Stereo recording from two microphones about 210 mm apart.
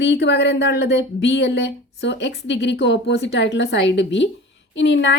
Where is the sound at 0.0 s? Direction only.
55° left (ahead or behind).